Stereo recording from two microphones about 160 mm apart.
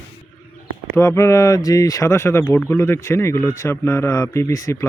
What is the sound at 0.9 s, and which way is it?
Speech, 15° left (ahead or behind).